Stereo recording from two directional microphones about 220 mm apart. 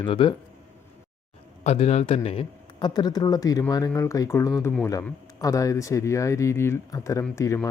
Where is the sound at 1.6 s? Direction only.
30° left (ahead or behind).